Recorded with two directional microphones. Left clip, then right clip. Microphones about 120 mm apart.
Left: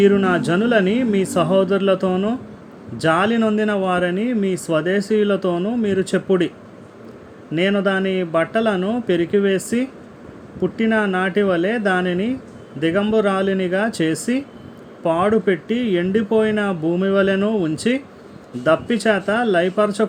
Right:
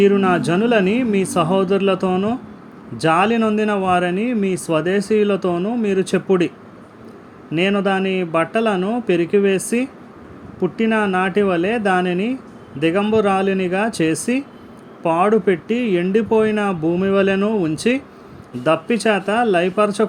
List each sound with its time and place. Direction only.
0.0 s speech: 20° right (ahead or behind)
7.5 s speech: 20° right (ahead or behind)